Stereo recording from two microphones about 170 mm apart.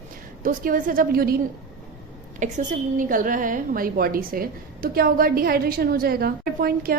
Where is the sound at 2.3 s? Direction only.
45° right (ahead or behind).